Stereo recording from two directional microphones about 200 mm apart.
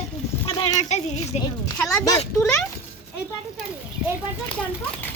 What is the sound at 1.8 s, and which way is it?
Speech, 5° left (ahead or behind).